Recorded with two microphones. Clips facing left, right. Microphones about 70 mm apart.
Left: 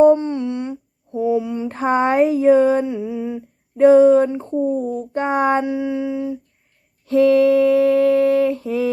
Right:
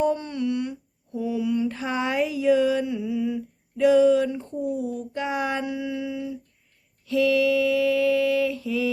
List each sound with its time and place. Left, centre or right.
0.0 s humming: left
4.6 s speech: left
5.6 s humming: left
7.0 s a sound: left